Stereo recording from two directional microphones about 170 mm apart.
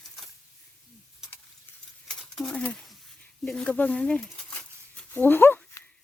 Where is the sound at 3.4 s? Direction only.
5° left (ahead or behind).